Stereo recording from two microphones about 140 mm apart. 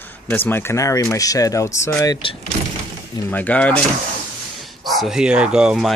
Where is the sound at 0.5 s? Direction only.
15° left (ahead or behind).